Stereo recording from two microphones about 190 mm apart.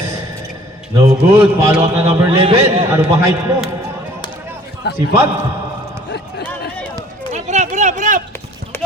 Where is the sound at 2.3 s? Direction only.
30° right (ahead or behind).